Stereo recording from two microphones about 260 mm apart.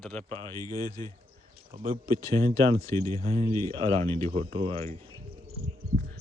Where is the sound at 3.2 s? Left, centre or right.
Right.